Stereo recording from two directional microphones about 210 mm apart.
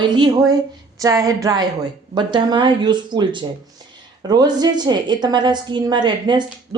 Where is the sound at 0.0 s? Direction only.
20° right (ahead or behind).